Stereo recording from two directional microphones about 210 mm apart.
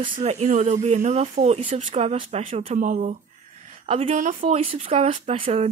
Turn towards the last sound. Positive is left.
turn(degrees=-30)  # may be behind; listen again after turning